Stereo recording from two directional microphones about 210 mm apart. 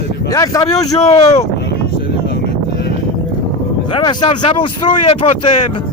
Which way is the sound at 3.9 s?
20° left (ahead or behind).